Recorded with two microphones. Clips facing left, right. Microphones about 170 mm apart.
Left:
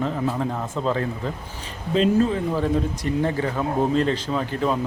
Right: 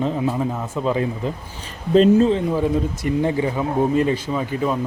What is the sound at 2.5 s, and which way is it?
Speech, 10° right (ahead or behind).